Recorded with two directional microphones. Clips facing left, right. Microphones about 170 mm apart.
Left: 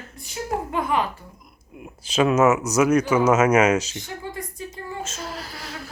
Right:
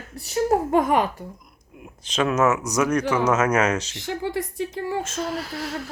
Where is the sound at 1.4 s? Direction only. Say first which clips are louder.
Left 3 dB; 5° left (ahead or behind).